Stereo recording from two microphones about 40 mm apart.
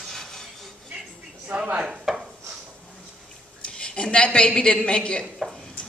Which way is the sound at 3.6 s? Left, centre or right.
Left.